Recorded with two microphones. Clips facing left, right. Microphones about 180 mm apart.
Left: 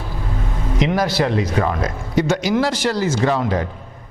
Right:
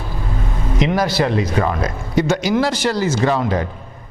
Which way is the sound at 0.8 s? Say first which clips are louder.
Right 1 dB; 15° right (ahead or behind).